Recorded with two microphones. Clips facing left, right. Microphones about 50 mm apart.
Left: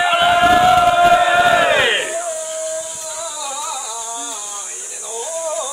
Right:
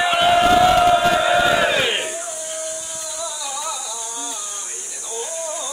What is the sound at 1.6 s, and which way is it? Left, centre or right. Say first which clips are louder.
Battle cry: left 4 dB; left.